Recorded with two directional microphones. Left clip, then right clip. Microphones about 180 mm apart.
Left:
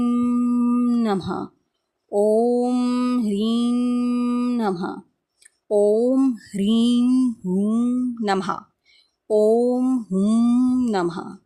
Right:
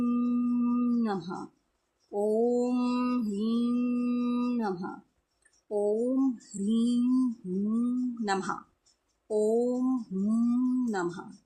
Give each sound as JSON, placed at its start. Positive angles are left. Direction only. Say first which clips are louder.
{"t": 0.0, "sound": "music", "louder": "left 8 dB", "side_deg": 35}
{"t": 2.1, "sound": "mantra", "louder": "left 9 dB", "side_deg": 40}
{"t": 5.6, "sound": "a sound", "louder": "left 11 dB", "side_deg": 45}
{"t": 9.2, "sound": "speech", "louder": "left 9 dB", "side_deg": 45}